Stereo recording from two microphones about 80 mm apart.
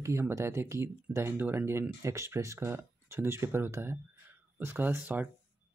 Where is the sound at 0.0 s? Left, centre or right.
Right.